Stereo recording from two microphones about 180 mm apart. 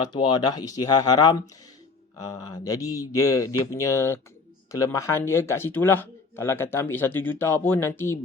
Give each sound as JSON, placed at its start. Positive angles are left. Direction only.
{"t": 0.1, "sound": "speech", "side_deg": 25}